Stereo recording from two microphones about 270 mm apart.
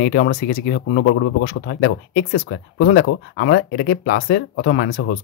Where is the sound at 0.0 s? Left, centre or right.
Left.